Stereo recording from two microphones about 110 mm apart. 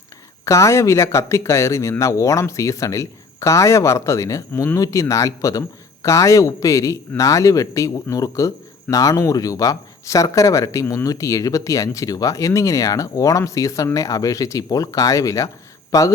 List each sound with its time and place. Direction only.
0.4 s speech: 30° left (ahead or behind)